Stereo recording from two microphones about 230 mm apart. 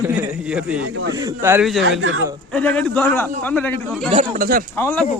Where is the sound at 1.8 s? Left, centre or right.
Right.